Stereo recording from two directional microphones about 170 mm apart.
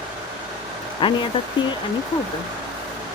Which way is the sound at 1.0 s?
30° left (ahead or behind).